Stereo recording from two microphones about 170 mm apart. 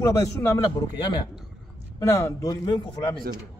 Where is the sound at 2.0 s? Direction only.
20° left (ahead or behind).